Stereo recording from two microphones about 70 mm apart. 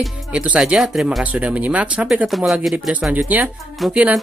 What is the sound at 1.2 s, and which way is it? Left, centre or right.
Speech, centre.